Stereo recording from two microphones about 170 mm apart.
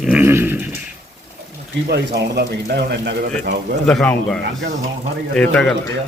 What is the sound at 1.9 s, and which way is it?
A man's voice, 80° right.